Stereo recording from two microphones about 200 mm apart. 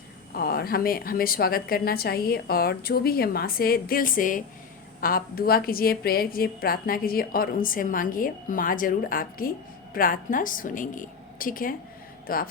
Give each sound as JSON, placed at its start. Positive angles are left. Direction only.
{"t": 0.3, "sound": "a woman's voice", "side_deg": 50}